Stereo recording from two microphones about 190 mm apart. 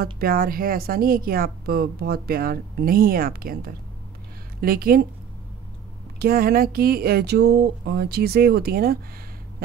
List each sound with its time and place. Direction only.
0.0 s a woman's voice: 50° right (ahead or behind)
6.1 s a woman's voice: 50° right (ahead or behind)